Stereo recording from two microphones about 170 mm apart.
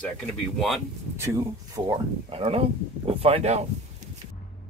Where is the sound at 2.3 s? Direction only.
35° right (ahead or behind).